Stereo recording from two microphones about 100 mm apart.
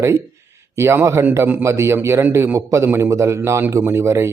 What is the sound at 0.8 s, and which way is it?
A man's voice, 25° right (ahead or behind).